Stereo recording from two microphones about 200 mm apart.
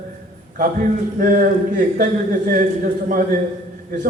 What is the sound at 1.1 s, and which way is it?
A man's voice, 45° right (ahead or behind).